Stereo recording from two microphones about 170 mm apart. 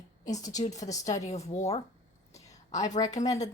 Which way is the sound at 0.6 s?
45° left (ahead or behind).